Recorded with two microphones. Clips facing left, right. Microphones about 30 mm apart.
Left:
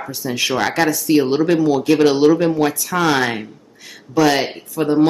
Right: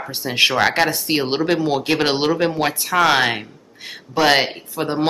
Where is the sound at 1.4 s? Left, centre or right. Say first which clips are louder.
Left 3 dB; right.